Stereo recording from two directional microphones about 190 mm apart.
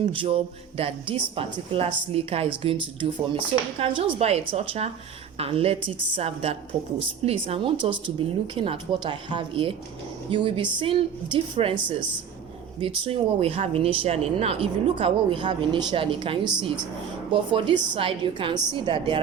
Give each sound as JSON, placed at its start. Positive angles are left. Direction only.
{"t": 0.0, "sound": "a woman's voice", "side_deg": -30}